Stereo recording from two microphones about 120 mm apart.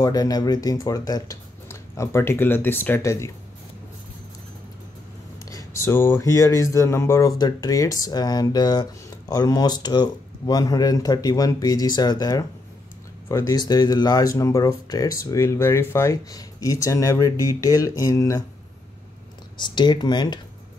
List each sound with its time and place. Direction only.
0.0 s speech: 30° left (ahead or behind)
5.5 s speech: 25° left (ahead or behind)
19.5 s speech: 40° left (ahead or behind)